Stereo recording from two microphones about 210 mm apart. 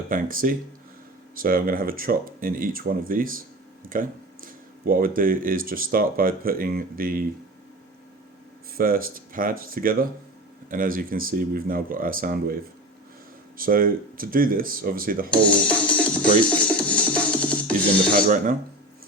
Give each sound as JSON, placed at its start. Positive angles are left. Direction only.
{"t": 0.1, "sound": "speech", "side_deg": -40}
{"t": 8.8, "sound": "speech", "side_deg": -45}
{"t": 13.6, "sound": "speech", "side_deg": -40}
{"t": 15.9, "sound": "music", "side_deg": 5}
{"t": 18.1, "sound": "speech", "side_deg": -40}